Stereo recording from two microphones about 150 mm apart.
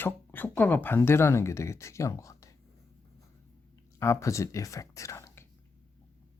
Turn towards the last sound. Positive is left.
turn(degrees=15)  # may be behind; listen again after turning